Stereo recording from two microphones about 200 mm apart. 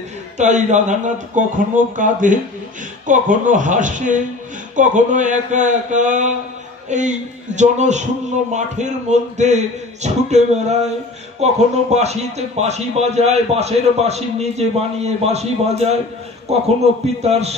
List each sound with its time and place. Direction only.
0.4 s speech: 35° right (ahead or behind)